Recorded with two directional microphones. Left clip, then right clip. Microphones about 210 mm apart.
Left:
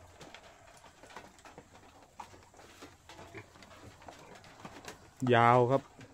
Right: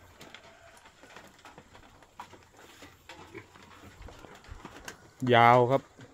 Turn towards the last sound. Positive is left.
turn(degrees=0)  # may be behind; listen again after turning